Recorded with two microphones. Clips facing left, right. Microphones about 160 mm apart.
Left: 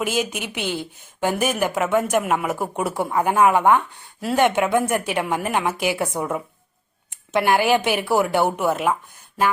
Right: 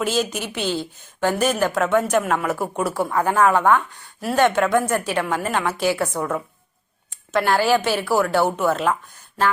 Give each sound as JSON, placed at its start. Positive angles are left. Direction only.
{"t": 0.0, "sound": "a woman's voice", "side_deg": 10}